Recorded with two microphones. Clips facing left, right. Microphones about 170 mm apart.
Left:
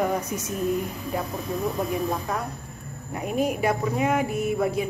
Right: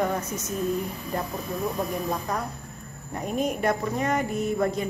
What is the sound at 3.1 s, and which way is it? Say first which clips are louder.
A woman's voice: left 2 dB; 5° left (ahead or behind).